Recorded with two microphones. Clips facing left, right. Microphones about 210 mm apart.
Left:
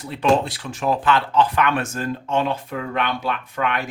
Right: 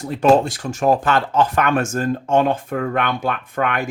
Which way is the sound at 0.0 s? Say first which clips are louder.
Right 4 dB; 45° right (ahead or behind).